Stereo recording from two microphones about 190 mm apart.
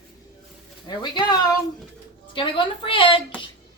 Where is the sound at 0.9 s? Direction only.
25° left (ahead or behind).